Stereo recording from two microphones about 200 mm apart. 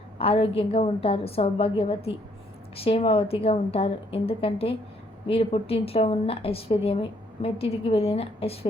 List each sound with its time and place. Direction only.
0.2 s a woman's voice: 30° left (ahead or behind)